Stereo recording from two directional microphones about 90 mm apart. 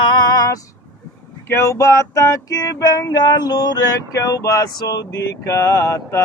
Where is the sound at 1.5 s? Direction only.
30° left (ahead or behind).